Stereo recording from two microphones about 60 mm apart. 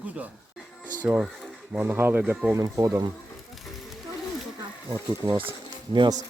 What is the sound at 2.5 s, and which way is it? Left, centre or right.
Speech, right.